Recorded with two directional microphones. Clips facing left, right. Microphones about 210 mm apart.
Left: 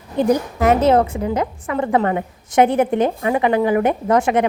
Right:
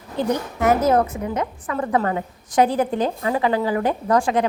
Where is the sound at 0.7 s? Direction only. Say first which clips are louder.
Left 3 dB; 25° left (ahead or behind).